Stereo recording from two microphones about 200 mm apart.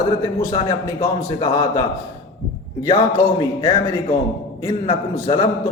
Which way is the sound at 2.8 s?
20° left (ahead or behind).